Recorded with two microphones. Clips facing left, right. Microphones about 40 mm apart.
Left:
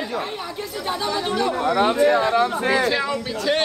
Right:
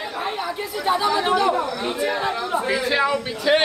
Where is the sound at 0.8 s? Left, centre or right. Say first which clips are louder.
Right 5 dB; centre.